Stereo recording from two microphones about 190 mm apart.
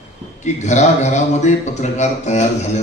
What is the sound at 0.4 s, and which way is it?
A man's voice, 35° left (ahead or behind).